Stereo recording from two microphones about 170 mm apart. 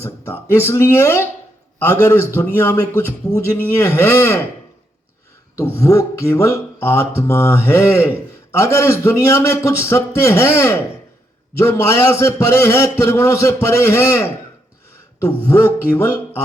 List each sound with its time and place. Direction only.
0.0 s speech: 15° left (ahead or behind)
5.5 s speech: 15° left (ahead or behind)
15.4 s speech: 10° left (ahead or behind)